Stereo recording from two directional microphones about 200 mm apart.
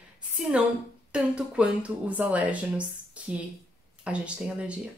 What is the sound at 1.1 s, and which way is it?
Speech, 5° right (ahead or behind).